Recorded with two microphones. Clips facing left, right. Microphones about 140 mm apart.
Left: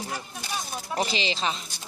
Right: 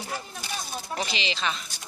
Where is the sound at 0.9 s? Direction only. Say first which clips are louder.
Left 4 dB; 40° left (ahead or behind).